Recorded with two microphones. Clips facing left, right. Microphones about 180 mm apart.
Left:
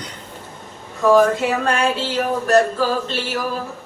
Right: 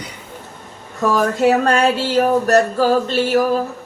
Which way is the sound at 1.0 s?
45° right (ahead or behind).